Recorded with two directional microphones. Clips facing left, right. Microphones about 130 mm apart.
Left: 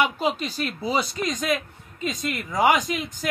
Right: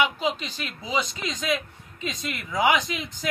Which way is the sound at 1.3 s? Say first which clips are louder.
Right 1 dB; 50° left (ahead or behind).